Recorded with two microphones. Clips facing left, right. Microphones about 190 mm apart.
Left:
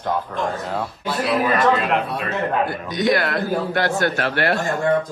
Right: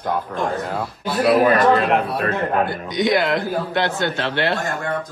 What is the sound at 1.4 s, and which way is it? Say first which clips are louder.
A man's voice: right 3 dB; 45° right (ahead or behind).